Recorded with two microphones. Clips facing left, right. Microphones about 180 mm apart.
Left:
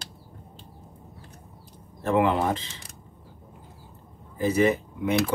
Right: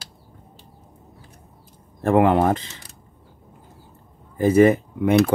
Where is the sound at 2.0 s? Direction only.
50° right (ahead or behind).